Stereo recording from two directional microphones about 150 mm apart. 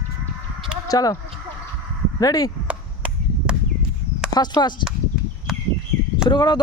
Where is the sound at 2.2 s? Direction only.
25° left (ahead or behind).